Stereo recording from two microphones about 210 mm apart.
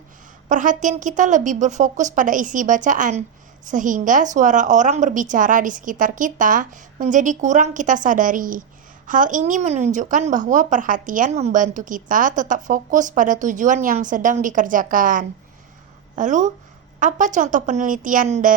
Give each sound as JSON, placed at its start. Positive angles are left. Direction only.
{"t": 0.4, "sound": "a woman's voice", "side_deg": -35}